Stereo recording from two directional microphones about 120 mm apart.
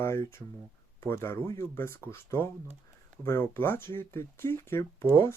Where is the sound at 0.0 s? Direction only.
20° left (ahead or behind).